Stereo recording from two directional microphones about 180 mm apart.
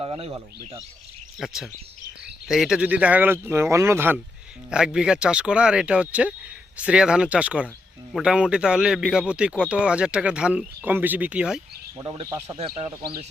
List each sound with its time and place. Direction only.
0.0 s speech: 30° right (ahead or behind)
1.4 s a man's voice: centre (ahead or behind)
11.9 s speech: 25° right (ahead or behind)
12.5 s speech: 35° right (ahead or behind)